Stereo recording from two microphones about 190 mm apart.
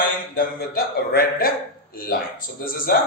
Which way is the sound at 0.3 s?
50° left (ahead or behind).